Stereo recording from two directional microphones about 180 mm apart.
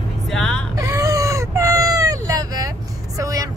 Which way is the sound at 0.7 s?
20° right (ahead or behind).